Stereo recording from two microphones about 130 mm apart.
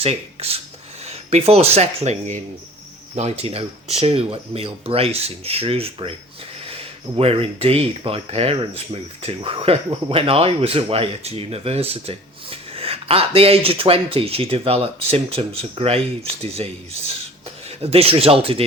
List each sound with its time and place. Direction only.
0.0 s speech: 50° right (ahead or behind)
17.7 s speech: 50° right (ahead or behind)